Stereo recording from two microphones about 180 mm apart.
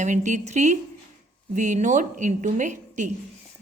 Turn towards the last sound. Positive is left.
turn(degrees=-40)  # may be behind; listen again after turning